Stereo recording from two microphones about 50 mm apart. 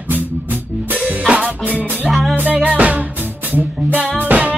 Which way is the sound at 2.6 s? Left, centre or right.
Right.